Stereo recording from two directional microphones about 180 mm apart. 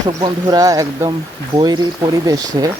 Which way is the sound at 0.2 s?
20° right (ahead or behind).